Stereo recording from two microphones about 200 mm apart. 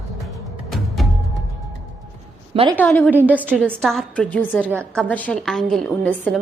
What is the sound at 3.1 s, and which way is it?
Speech, 10° right (ahead or behind).